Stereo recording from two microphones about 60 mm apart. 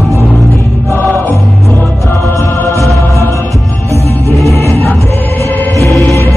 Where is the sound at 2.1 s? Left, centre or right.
Left.